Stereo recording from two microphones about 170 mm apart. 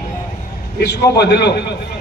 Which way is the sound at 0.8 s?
80° left.